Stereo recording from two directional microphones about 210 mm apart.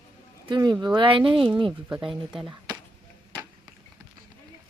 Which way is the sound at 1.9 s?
5° right (ahead or behind).